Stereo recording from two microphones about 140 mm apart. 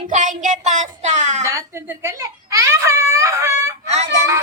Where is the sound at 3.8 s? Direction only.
50° right (ahead or behind).